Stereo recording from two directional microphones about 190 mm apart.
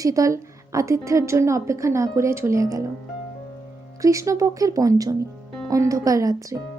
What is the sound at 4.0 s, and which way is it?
A woman's voice, 15° right (ahead or behind).